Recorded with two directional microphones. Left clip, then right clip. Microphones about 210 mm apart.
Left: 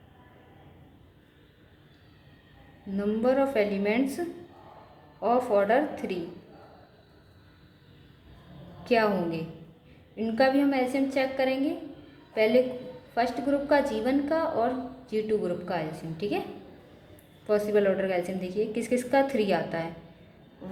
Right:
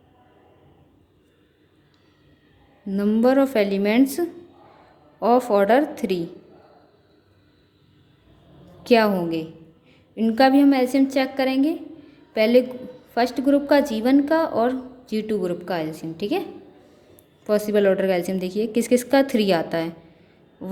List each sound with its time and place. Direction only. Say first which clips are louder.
2.9 s a woman's voice: right 7 dB; 45° right (ahead or behind)
5.2 s a woman's voice: right 6 dB; 45° right (ahead or behind)
8.8 s a woman's voice: right 6 dB; 45° right (ahead or behind)
17.4 s a woman's voice: right 5 dB; 45° right (ahead or behind)